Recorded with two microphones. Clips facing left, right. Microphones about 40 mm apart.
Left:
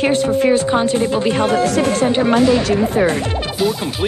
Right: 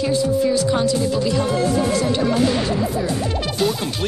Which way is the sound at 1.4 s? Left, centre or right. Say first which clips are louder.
Left 4 dB; left.